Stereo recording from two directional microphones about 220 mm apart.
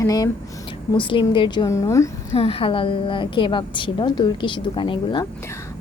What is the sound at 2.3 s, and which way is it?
A woman's voice, 25° left (ahead or behind).